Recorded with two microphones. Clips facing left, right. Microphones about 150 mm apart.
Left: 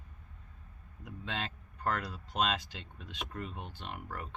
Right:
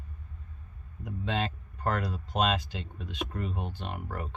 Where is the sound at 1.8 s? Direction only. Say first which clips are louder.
Right 4 dB; 40° right (ahead or behind).